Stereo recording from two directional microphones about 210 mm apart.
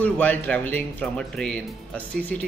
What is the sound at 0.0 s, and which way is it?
Speech, 5° left (ahead or behind).